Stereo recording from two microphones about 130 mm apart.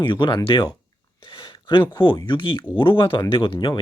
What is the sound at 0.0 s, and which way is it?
Speech, 40° left (ahead or behind).